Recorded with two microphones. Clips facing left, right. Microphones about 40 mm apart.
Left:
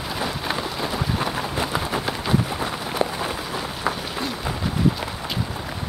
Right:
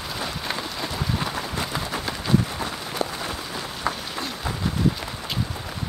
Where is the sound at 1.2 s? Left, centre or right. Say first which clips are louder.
Left 3 dB; centre.